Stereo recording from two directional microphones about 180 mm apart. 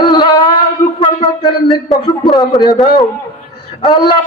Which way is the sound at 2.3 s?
20° left (ahead or behind).